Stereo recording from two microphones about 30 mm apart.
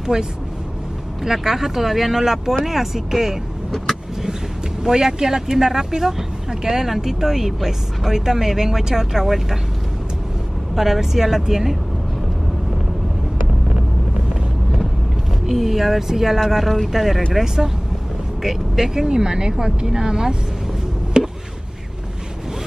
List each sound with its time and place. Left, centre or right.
0.0 s speech: right
4.8 s speech: centre
10.7 s speech: centre
15.4 s speech: centre
18.4 s speech: centre
19.0 s speech: right
21.2 s chop: right